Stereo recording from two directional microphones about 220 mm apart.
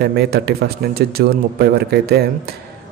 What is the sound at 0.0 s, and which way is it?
A man's voice, 45° right (ahead or behind).